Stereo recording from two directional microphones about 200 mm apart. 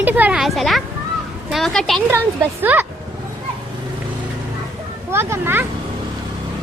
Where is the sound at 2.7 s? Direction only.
10° right (ahead or behind).